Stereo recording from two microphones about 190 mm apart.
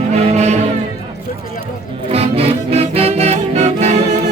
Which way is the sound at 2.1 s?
30° right (ahead or behind).